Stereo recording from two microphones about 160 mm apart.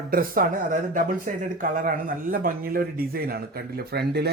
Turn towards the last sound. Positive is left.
turn(degrees=-90)